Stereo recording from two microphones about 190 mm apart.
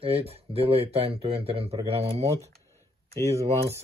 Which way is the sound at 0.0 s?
30° right (ahead or behind).